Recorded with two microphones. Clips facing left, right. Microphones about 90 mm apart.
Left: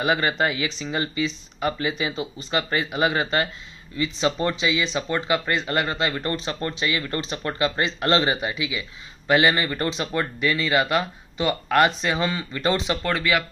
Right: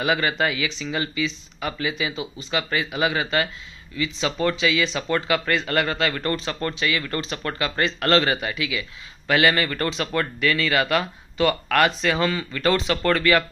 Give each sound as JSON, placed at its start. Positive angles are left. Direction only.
{"t": 0.0, "sound": "speech", "side_deg": 30}